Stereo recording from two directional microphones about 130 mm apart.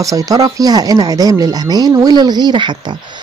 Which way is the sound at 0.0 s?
25° right (ahead or behind).